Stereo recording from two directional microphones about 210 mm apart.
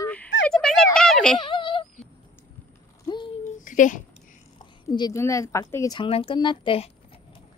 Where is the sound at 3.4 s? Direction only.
40° left (ahead or behind).